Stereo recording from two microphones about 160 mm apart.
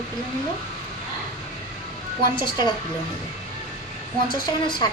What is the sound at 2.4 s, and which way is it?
Speech, 30° left (ahead or behind).